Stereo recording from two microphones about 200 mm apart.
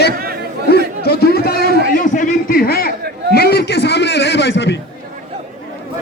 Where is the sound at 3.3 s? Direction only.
50° left (ahead or behind).